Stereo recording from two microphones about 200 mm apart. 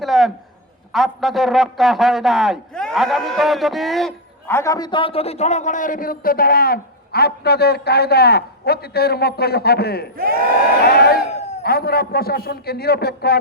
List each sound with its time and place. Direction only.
0.0 s a sound: centre (ahead or behind)
0.9 s a man's voice: centre (ahead or behind)
4.4 s a man's voice: 15° left (ahead or behind); by 13.4 s 50° left (ahead or behind)